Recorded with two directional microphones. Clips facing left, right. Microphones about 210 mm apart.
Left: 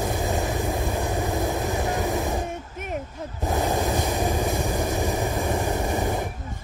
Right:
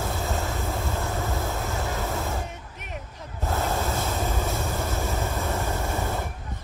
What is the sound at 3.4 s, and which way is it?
Vehicle, 15° left (ahead or behind).